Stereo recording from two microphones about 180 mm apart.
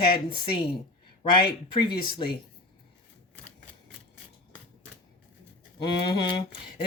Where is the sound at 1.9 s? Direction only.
25° left (ahead or behind).